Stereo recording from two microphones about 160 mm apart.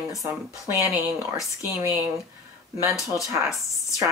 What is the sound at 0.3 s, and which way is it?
Speech, 15° right (ahead or behind).